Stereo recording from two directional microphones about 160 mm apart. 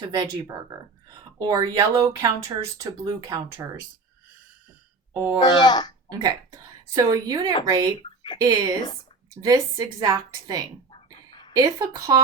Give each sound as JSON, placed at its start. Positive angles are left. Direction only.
{"t": 1.4, "sound": "speech", "side_deg": -25}
{"t": 5.1, "sound": "speech", "side_deg": -15}
{"t": 5.4, "sound": "speech", "side_deg": 25}
{"t": 6.1, "sound": "speech", "side_deg": -25}
{"t": 10.9, "sound": "a sound", "side_deg": 30}
{"t": 11.5, "sound": "speech", "side_deg": -25}